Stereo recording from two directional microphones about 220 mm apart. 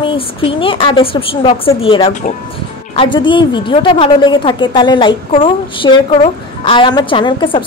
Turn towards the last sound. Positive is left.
turn(degrees=25)  # may be behind; listen again after turning